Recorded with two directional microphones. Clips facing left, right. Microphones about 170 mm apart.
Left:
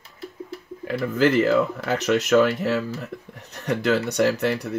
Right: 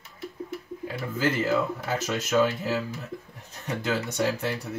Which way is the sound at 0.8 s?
75° left (ahead or behind).